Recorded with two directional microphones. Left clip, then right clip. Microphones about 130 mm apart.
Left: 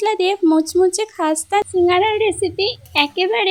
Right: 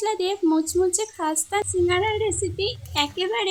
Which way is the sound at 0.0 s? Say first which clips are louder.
Left 7 dB; 60° left (ahead or behind).